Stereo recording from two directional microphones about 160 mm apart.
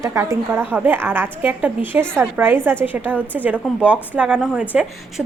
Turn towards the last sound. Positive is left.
turn(degrees=-5)  # may be behind; listen again after turning